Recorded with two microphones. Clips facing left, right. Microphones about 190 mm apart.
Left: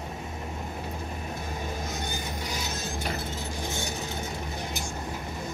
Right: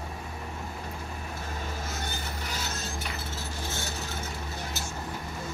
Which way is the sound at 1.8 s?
15° left (ahead or behind).